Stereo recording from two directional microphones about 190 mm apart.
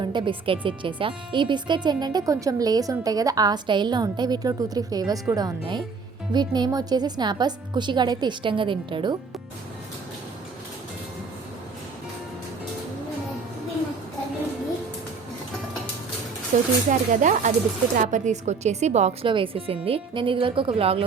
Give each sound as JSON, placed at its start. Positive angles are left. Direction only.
{"t": 0.0, "sound": "speech", "side_deg": -25}
{"t": 16.5, "sound": "speech", "side_deg": -40}